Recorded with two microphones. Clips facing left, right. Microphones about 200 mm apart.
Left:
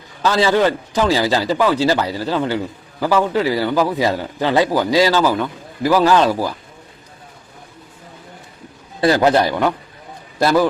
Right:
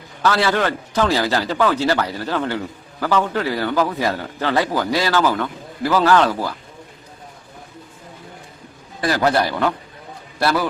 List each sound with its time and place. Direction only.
0.2 s a man's voice: 15° left (ahead or behind)
9.0 s a man's voice: 25° left (ahead or behind)